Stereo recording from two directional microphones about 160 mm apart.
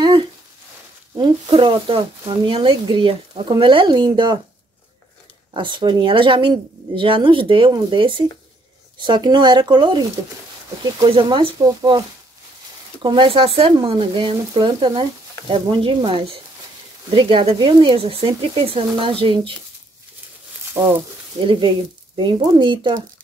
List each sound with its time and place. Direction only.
0.0 s a sound: 30° right (ahead or behind)
1.1 s speech: 30° right (ahead or behind)
5.5 s speech: 30° right (ahead or behind)
13.0 s speech: 30° right (ahead or behind)
20.8 s speech: 15° right (ahead or behind)
21.4 s speech: 30° right (ahead or behind)